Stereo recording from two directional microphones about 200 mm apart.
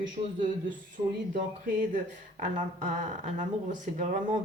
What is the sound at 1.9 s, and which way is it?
Speech, 40° right (ahead or behind).